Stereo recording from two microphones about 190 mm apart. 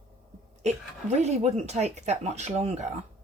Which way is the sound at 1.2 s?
35° right (ahead or behind).